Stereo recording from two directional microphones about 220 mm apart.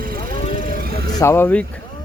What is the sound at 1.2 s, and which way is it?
Speech, 10° left (ahead or behind).